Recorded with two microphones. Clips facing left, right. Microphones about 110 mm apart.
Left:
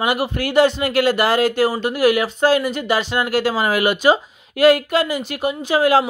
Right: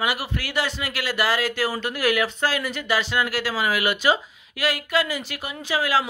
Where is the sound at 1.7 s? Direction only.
15° left (ahead or behind).